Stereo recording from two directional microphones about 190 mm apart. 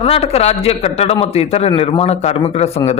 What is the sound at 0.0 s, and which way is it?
A man's voice, 30° left (ahead or behind).